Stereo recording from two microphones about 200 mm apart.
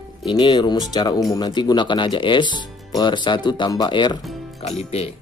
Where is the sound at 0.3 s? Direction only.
25° left (ahead or behind).